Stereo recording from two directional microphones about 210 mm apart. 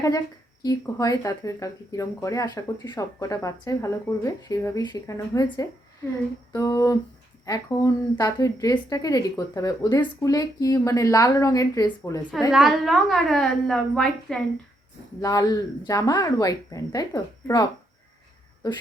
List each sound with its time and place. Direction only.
0.6 s speech: 15° left (ahead or behind)
12.5 s a woman's voice: centre (ahead or behind)
15.2 s speech: 15° left (ahead or behind)